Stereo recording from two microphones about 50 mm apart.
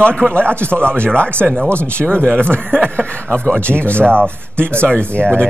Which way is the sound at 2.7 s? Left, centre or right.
Right.